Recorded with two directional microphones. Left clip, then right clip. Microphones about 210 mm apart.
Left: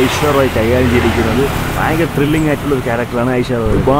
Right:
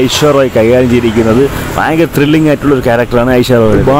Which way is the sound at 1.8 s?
40° right (ahead or behind).